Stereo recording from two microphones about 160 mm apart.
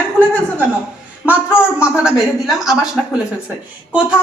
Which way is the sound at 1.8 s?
5° right (ahead or behind).